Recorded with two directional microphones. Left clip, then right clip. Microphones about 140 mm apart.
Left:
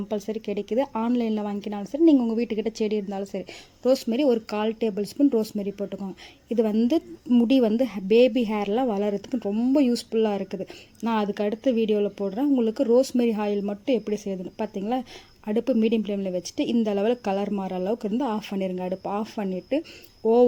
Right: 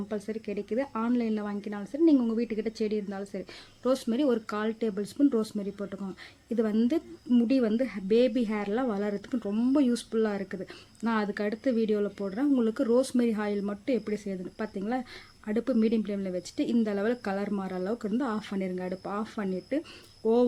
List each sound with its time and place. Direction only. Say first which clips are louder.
0.1 s speech: left 7 dB; 20° left (ahead or behind)
6.6 s speech: left 5 dB; 15° left (ahead or behind)
7.4 s speech: left 8 dB; 25° left (ahead or behind)
9.3 s speech: left 2 dB; 5° left (ahead or behind)